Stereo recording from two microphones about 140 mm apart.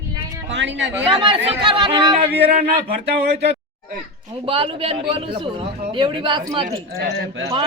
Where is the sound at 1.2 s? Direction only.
35° right (ahead or behind).